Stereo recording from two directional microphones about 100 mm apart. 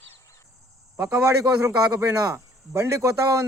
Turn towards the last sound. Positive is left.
turn(degrees=-30)  # may be behind; listen again after turning